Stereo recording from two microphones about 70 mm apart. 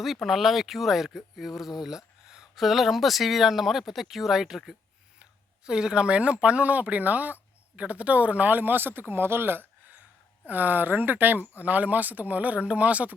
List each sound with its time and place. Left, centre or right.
0.0 s speech: centre